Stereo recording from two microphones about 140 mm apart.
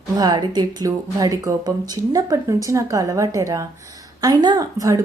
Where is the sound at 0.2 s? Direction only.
30° right (ahead or behind).